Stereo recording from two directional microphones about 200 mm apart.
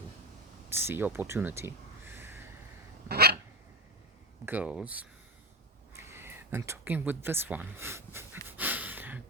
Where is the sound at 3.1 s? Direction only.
50° right (ahead or behind).